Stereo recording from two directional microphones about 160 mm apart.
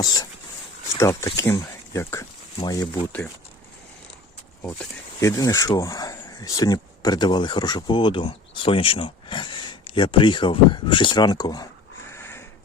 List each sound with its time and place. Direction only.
0.0 s dog: 25° left (ahead or behind)
0.9 s speech: 20° left (ahead or behind)
2.9 s speech: 10° left (ahead or behind)
5.2 s speech: 20° left (ahead or behind)
12.1 s sniff: 15° left (ahead or behind)